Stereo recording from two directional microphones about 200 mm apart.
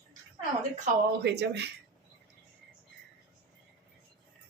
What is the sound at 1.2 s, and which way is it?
Speech, 60° right (ahead or behind).